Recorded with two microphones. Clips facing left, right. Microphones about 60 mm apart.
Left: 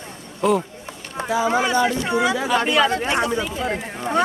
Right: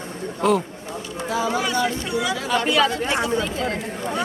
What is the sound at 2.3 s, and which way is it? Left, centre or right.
Speech, centre.